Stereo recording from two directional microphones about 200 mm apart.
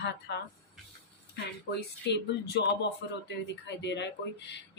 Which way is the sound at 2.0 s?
55° left (ahead or behind).